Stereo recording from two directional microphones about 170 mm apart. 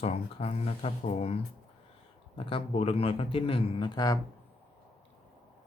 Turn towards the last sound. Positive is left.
turn(degrees=20)  # may be behind; listen again after turning